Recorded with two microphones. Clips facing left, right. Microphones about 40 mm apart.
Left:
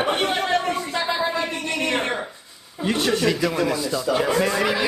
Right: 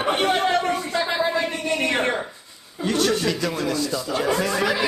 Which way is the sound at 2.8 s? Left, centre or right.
Centre.